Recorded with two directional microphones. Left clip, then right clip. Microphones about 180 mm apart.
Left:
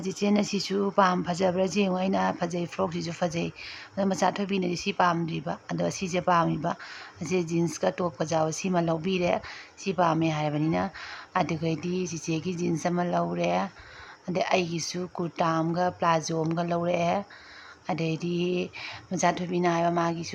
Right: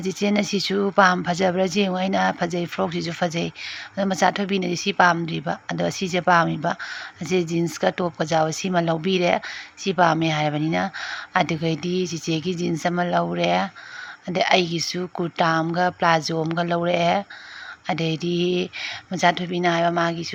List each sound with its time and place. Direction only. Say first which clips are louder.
0.0 s speech: right 4 dB; 10° right (ahead or behind)